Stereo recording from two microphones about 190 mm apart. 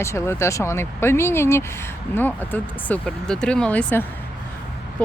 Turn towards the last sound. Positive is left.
turn(degrees=5)  # may be behind; listen again after turning